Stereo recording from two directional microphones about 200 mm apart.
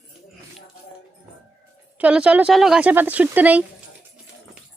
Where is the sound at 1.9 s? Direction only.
5° right (ahead or behind).